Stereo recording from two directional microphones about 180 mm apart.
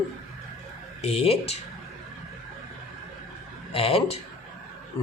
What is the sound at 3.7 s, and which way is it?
Speech, 35° left (ahead or behind).